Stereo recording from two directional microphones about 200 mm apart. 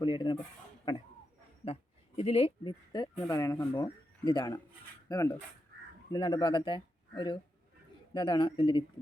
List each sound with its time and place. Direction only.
0.0 s speech: 20° left (ahead or behind)
1.6 s a sound: 30° left (ahead or behind)
8.1 s speech: 25° left (ahead or behind)